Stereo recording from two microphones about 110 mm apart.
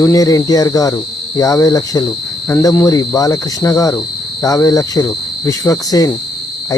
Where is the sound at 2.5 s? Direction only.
30° left (ahead or behind).